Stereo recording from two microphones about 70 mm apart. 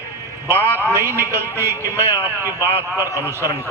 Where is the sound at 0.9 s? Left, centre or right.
Right.